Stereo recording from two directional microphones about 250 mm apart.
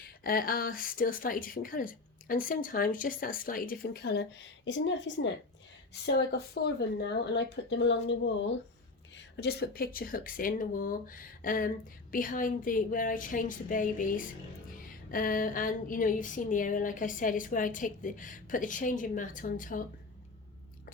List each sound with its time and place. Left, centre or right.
0.2 s speech: left